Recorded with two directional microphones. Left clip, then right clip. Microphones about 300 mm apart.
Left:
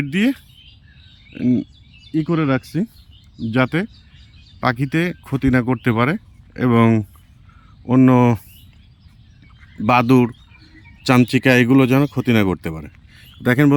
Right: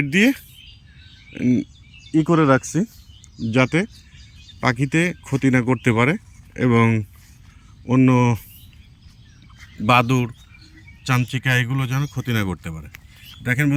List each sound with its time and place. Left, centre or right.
0.0 s speech: centre
9.8 s speech: centre